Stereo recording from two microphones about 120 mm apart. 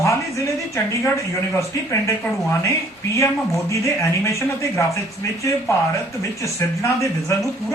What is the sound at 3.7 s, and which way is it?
Speech, 25° left (ahead or behind).